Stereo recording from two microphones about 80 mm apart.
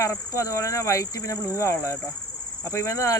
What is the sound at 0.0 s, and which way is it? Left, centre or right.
Speech, left.